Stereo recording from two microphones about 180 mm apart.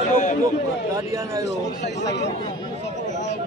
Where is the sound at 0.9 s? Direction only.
15° right (ahead or behind).